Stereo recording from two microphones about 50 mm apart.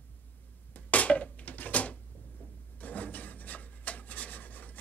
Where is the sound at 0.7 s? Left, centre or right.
Left.